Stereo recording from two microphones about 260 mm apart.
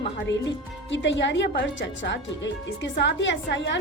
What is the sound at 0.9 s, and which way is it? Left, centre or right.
Speech, left.